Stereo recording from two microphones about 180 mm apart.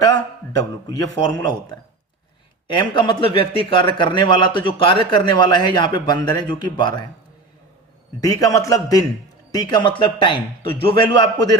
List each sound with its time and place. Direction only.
0.0 s a man's voice: 20° left (ahead or behind)
2.7 s a man's voice: 25° left (ahead or behind)
8.2 s a man's voice: 20° left (ahead or behind)